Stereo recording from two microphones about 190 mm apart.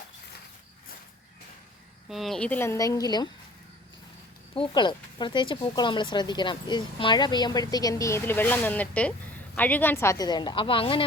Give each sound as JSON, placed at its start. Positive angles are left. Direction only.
{"t": 2.0, "sound": "speech", "side_deg": 0}
{"t": 4.5, "sound": "speech", "side_deg": 25}